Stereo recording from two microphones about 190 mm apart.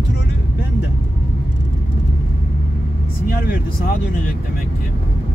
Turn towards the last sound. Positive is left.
turn(degrees=50)  # may be behind; listen again after turning